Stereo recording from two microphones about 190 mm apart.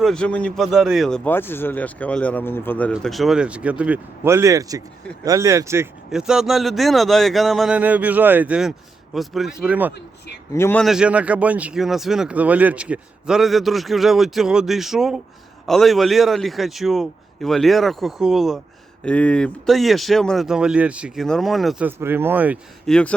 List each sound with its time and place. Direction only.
0.0 s speech: 5° left (ahead or behind); by 5.9 s 15° right (ahead or behind)
6.1 s speech: 5° right (ahead or behind)
10.5 s speech: 10° left (ahead or behind)
10.8 s speech: 5° right (ahead or behind)
22.9 s speech: 5° left (ahead or behind)